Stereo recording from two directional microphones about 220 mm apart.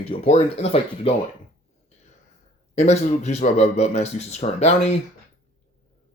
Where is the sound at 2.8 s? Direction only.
30° left (ahead or behind).